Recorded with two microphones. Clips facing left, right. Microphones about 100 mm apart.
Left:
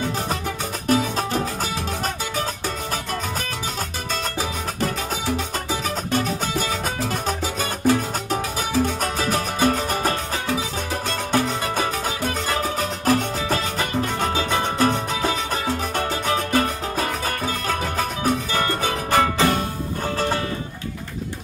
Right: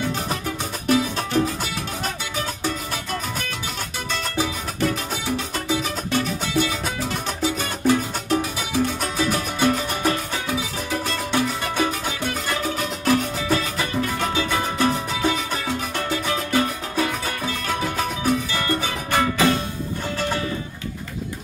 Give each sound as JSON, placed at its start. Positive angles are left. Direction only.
{"t": 0.8, "sound": "music", "side_deg": 40}
{"t": 4.4, "sound": "music", "side_deg": 40}